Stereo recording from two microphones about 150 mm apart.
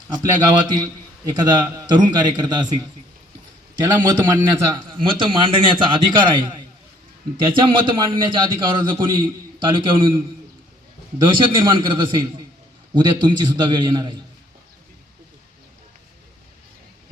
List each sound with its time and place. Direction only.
0.1 s a man's voice: 25° right (ahead or behind)
11.4 s a man's voice: 35° right (ahead or behind)